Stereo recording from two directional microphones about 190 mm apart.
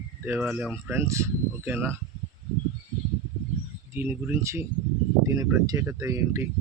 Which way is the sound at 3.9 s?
10° right (ahead or behind).